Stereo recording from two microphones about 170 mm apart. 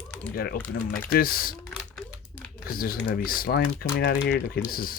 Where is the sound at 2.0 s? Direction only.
10° left (ahead or behind).